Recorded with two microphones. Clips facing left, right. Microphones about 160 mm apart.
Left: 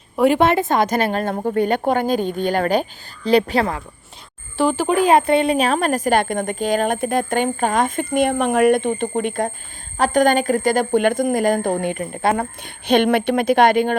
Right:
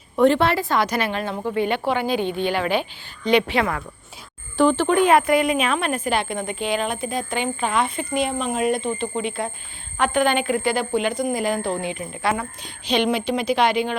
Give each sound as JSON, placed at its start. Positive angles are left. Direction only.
{"t": 0.2, "sound": "a woman's voice", "side_deg": 15}
{"t": 0.8, "sound": "a woman's voice", "side_deg": 45}
{"t": 4.5, "sound": "speech", "side_deg": 5}
{"t": 5.1, "sound": "a woman's voice", "side_deg": 30}